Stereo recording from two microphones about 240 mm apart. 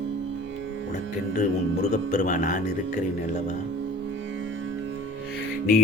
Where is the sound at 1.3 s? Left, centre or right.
Left.